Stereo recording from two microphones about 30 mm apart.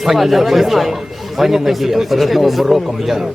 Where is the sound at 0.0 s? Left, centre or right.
Centre.